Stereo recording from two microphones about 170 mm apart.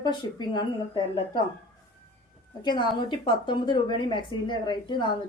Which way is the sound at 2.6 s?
25° left (ahead or behind).